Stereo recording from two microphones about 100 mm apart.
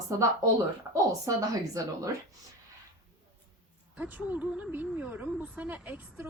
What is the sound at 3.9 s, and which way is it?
A woman's voice, 15° right (ahead or behind).